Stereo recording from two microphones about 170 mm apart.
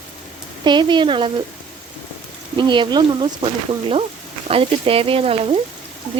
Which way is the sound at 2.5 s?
25° right (ahead or behind).